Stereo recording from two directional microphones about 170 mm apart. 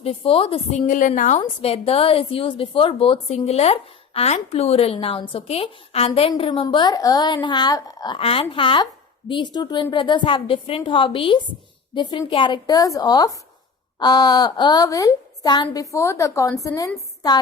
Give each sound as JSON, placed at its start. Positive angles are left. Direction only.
{"t": 0.0, "sound": "a woman's voice", "side_deg": 35}
{"t": 0.9, "sound": "a woman's voice", "side_deg": 50}
{"t": 1.4, "sound": "a woman's voice", "side_deg": 35}